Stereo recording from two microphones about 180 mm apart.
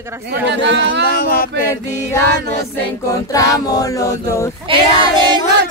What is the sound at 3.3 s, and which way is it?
Music, 20° left (ahead or behind).